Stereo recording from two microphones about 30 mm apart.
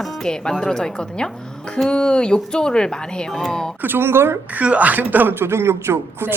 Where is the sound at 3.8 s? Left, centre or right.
Right.